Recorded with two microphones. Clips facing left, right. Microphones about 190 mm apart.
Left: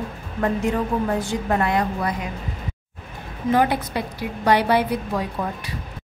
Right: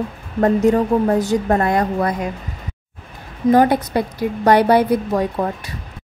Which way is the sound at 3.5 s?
45° right (ahead or behind).